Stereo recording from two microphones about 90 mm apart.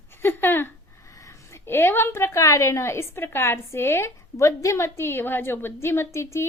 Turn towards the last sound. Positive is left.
turn(degrees=30)  # may be behind; listen again after turning